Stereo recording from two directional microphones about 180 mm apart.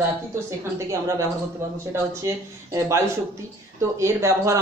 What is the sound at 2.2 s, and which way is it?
Speech, 15° right (ahead or behind).